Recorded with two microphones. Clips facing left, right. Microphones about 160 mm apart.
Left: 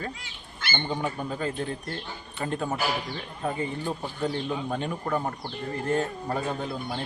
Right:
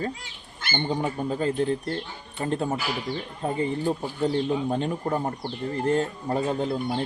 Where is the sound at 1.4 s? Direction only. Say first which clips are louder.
Right 6 dB; 30° right (ahead or behind).